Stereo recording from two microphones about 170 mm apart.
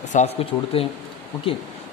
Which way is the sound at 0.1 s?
40° left (ahead or behind).